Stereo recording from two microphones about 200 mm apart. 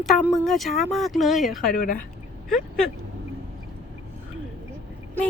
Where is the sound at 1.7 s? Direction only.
45° left (ahead or behind).